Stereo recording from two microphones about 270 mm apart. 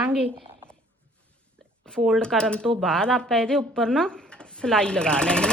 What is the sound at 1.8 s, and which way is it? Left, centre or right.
Speech, centre.